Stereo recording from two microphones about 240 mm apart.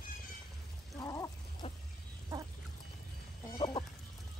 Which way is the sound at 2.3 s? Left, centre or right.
Centre.